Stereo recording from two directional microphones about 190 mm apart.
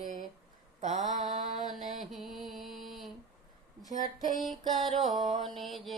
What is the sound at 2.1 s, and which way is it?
Music, centre (ahead or behind).